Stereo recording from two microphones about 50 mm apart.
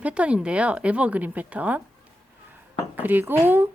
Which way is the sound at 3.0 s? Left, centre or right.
Right.